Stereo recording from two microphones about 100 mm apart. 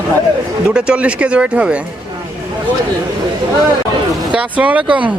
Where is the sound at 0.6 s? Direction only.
10° right (ahead or behind).